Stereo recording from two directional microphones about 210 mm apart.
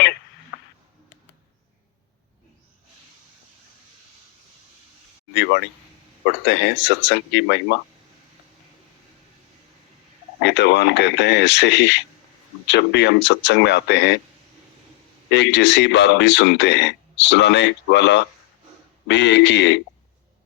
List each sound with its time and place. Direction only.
5.3 s speech: 55° left (ahead or behind)
10.4 s speech: 55° left (ahead or behind)
15.3 s speech: 55° left (ahead or behind)